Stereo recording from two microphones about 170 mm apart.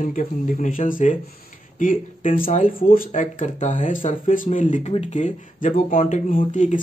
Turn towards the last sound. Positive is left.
turn(degrees=45)  # may be behind; listen again after turning